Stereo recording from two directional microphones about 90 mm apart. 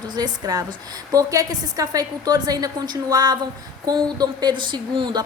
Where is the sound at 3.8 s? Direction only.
50° right (ahead or behind).